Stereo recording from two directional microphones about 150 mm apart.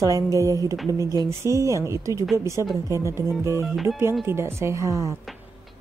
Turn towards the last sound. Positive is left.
turn(degrees=-20)  # may be behind; listen again after turning